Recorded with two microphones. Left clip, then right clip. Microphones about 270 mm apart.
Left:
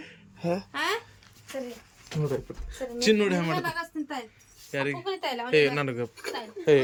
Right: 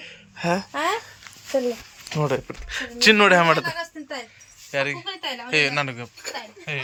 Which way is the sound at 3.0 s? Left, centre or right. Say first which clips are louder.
Right 10 dB; centre.